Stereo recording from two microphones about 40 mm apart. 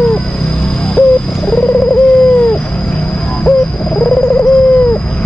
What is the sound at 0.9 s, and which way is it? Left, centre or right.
Bird, left.